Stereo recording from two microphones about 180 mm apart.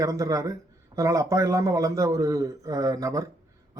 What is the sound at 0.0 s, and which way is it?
A man's voice, 20° right (ahead or behind).